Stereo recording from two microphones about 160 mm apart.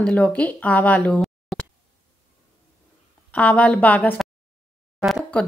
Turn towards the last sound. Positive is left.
turn(degrees=5)  # may be behind; listen again after turning